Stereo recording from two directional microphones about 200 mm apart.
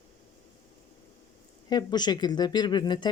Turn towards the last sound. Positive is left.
turn(degrees=20)  # may be behind; listen again after turning